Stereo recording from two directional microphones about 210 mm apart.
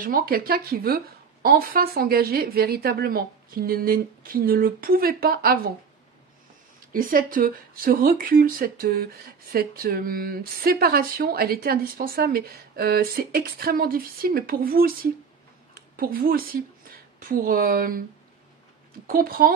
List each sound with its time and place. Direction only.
0.0 s speech: 45° right (ahead or behind)
6.9 s a woman's voice: 40° right (ahead or behind)
19.0 s speech: 45° right (ahead or behind)